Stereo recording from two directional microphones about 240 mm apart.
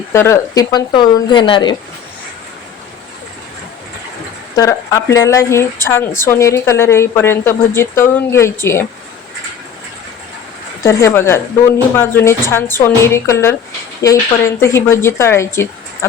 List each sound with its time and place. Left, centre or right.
0.1 s a woman's voice: centre
4.5 s a woman's voice: centre
10.8 s a woman's voice: centre